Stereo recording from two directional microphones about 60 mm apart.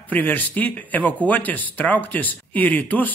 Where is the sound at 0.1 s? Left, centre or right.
Left.